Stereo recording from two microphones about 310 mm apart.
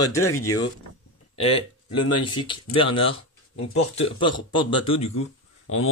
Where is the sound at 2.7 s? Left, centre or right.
Centre.